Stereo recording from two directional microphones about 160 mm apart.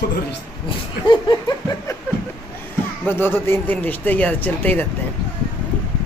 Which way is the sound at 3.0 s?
15° left (ahead or behind).